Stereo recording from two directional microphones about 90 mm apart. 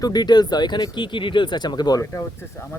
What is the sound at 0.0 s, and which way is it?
Speech, 50° left (ahead or behind).